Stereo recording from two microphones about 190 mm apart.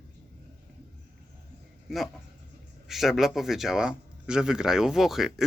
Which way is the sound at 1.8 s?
Centre (ahead or behind).